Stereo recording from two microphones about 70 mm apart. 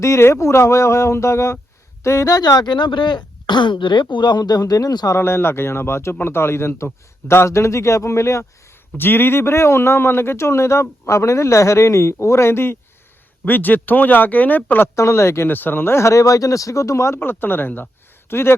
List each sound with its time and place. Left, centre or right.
0.0 s a man's voice: left
2.6 s speech: left
5.1 s a man's voice: left
9.0 s a man's voice: left
13.4 s speech: left
14.9 s a man's voice: left
15.4 s a man's voice: left
17.2 s a man's voice: left